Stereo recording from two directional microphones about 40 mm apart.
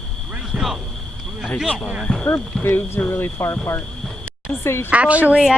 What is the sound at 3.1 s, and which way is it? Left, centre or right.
Speech, left.